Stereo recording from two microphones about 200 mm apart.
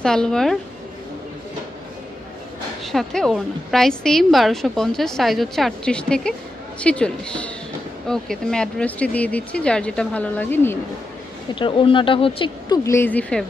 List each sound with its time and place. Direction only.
0.0 s a woman's voice: 5° left (ahead or behind)
2.8 s a woman's voice: centre (ahead or behind)
11.5 s speech: 25° left (ahead or behind); by 13.5 s 5° left (ahead or behind)